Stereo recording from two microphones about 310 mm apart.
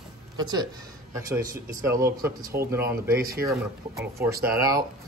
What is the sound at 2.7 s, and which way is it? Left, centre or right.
Speech, centre.